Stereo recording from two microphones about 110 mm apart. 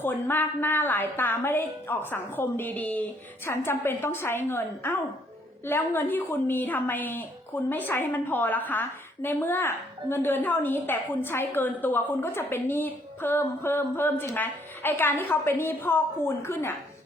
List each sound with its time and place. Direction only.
0.0 s a woman's voice: 20° left (ahead or behind)